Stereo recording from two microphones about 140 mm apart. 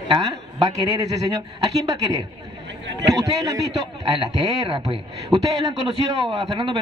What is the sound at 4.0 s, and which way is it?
A man's voice, 35° right (ahead or behind).